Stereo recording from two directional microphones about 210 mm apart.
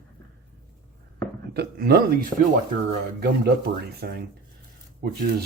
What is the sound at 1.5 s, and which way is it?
Speech, 50° right (ahead or behind).